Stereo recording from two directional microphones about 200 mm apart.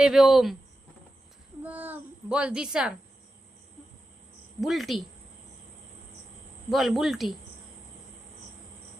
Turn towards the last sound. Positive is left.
turn(degrees=0)  # may be behind; listen again after turning